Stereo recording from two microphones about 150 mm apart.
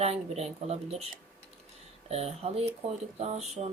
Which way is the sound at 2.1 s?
45° right (ahead or behind).